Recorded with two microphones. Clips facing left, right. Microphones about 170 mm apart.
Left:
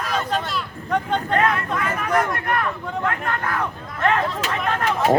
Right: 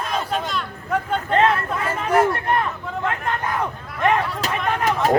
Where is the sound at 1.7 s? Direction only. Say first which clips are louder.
Right 2 dB; 25° right (ahead or behind).